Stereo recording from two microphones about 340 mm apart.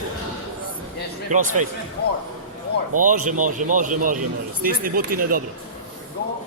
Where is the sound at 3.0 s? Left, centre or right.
Right.